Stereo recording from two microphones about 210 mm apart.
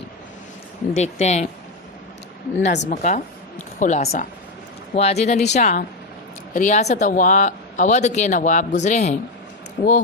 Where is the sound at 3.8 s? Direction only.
35° left (ahead or behind).